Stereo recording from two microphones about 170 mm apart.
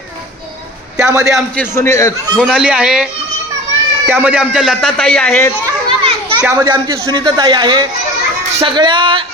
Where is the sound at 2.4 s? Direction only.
5° right (ahead or behind).